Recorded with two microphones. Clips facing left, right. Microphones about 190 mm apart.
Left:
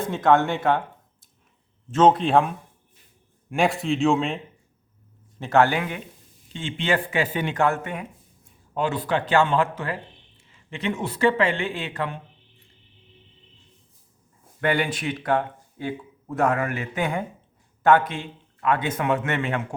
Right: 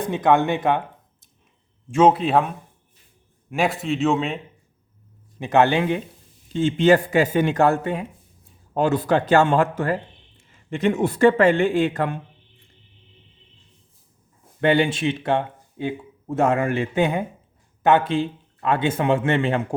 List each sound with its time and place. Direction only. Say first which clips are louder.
0.0 s speech: right 1 dB; 15° right (ahead or behind)
1.9 s a man's voice: right 1 dB; 10° right (ahead or behind)
3.5 s a man's voice: even; centre (ahead or behind)
5.4 s speech: right 2 dB; 20° right (ahead or behind)
6.5 s speech: right 9 dB; 40° right (ahead or behind)
8.7 s speech: right 5 dB; 45° right (ahead or behind)
14.6 s speech: right 5 dB; 25° right (ahead or behind)